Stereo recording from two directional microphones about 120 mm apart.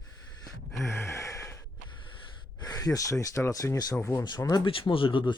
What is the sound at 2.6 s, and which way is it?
Speech, 30° left (ahead or behind).